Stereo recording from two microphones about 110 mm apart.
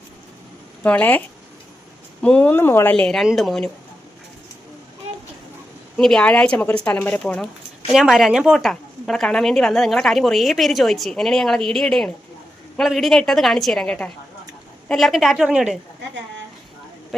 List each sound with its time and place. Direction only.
0.8 s speech: 15° left (ahead or behind)
2.2 s speech: 15° left (ahead or behind)
2.9 s a woman's voice: 10° left (ahead or behind)
6.0 s speech: 5° left (ahead or behind)
7.9 s a woman's voice: 5° right (ahead or behind)